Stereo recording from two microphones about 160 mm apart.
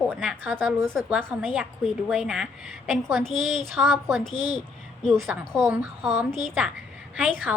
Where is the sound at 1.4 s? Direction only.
5° right (ahead or behind).